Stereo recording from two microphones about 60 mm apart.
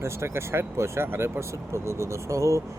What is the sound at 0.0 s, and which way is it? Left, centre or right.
Speech, right.